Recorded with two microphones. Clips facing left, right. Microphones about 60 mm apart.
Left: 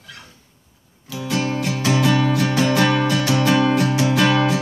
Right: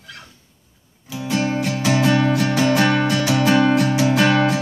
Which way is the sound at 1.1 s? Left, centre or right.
Centre.